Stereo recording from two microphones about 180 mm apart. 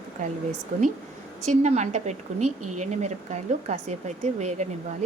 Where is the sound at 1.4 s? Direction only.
40° right (ahead or behind).